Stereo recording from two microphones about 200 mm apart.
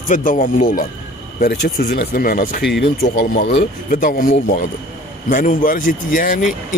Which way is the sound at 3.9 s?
45° left (ahead or behind).